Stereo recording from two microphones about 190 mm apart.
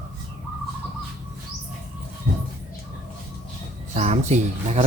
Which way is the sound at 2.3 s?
55° right (ahead or behind).